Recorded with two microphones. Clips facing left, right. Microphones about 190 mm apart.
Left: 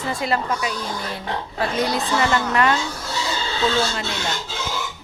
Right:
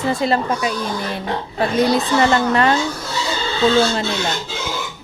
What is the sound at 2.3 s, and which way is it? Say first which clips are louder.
Speech: right 4 dB; 30° right (ahead or behind).